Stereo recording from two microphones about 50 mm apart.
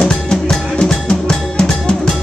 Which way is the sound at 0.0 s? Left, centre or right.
Centre.